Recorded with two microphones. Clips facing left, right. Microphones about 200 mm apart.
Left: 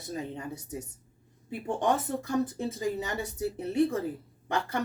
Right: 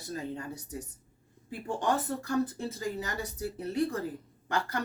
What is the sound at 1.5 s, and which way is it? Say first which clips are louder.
A woman's voice: left 2 dB; 20° left (ahead or behind).